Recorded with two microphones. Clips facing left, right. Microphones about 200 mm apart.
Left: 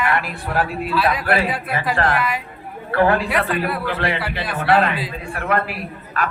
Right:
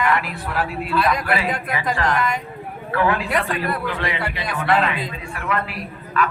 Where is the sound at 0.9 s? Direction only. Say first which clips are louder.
Left 1 dB; 5° left (ahead or behind).